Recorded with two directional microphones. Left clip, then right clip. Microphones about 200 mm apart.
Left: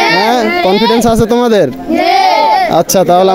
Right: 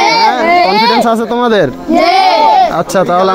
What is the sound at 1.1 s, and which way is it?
Speech, 85° left.